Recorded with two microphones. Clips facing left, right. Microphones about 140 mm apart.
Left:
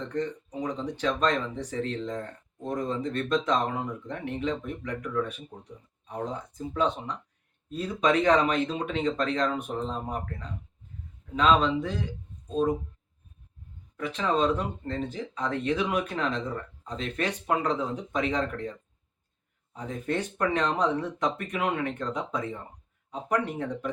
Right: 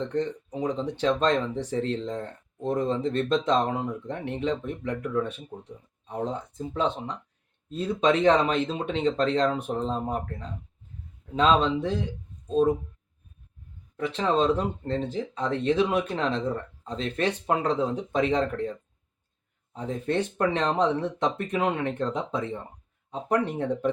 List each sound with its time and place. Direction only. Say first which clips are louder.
0.1 s speech: right 3 dB; 30° right (ahead or behind)
13.9 s speech: right 2 dB; 30° right (ahead or behind)